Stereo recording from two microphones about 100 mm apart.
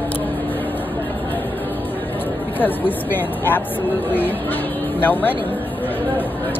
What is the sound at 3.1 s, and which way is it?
Speech, 20° left (ahead or behind).